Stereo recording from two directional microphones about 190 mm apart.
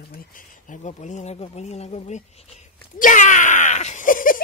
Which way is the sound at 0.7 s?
40° left (ahead or behind).